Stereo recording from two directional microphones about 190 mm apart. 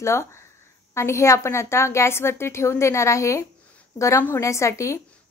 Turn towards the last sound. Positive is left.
turn(degrees=15)  # may be behind; listen again after turning